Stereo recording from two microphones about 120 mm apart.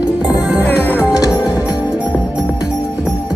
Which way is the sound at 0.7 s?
15° left (ahead or behind).